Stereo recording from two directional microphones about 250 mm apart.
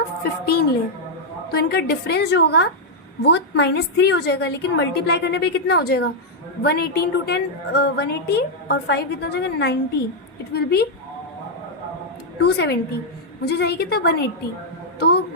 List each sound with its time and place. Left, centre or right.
0.2 s a woman's voice: left
12.4 s a woman's voice: left